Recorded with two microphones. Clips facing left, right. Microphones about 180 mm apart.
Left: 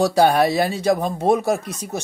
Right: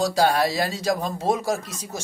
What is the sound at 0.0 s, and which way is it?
Speech, 60° left (ahead or behind).